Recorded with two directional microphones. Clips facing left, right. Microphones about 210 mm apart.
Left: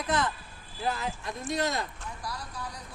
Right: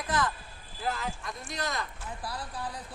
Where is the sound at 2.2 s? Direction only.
30° right (ahead or behind).